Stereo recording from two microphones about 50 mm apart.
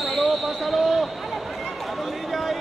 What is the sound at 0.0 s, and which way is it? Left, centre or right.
Basketball bounce, centre.